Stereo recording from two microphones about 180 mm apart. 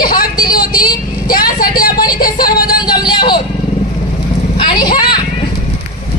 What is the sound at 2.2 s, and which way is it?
Music, 55° left (ahead or behind).